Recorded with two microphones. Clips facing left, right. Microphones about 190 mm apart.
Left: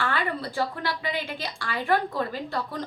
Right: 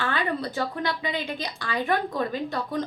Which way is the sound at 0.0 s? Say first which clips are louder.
Right 1 dB; 20° right (ahead or behind).